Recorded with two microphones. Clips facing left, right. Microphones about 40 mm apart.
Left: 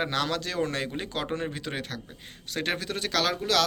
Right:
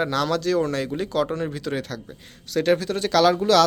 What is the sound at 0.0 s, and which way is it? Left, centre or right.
Speech, centre.